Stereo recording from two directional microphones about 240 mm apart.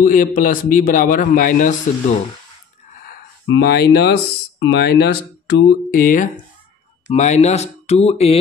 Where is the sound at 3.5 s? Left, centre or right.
Left.